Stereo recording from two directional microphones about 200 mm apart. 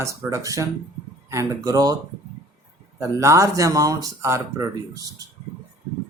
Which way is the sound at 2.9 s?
15° right (ahead or behind).